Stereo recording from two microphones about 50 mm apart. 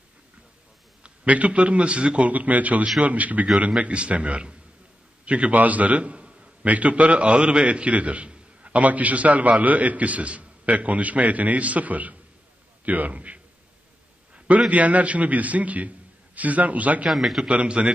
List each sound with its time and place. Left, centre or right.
1.0 s a man's voice: right
14.7 s a man's voice: right
17.1 s a man's voice: centre
17.5 s a man's voice: right